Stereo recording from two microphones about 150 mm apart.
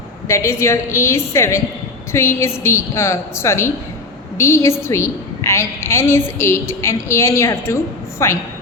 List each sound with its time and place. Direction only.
0.3 s a woman's voice: 20° left (ahead or behind)